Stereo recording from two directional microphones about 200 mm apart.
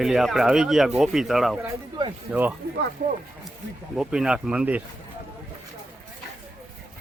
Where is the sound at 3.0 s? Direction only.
45° right (ahead or behind).